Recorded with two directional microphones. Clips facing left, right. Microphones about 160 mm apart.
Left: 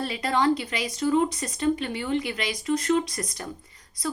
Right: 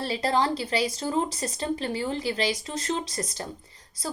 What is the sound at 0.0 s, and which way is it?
Speech, 30° right (ahead or behind).